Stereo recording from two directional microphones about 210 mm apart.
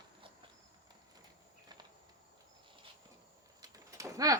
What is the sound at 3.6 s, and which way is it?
Bird, 15° right (ahead or behind).